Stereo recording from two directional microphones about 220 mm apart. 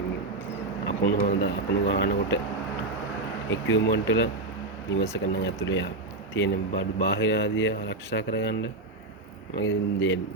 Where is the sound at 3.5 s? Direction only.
60° left (ahead or behind).